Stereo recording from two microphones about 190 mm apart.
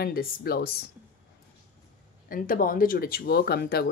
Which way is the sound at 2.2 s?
45° left (ahead or behind).